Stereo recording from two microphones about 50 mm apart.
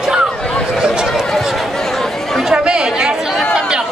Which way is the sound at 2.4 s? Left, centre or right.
Centre.